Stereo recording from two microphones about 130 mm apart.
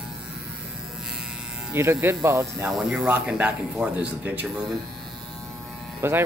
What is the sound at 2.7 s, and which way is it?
Speech, 5° right (ahead or behind).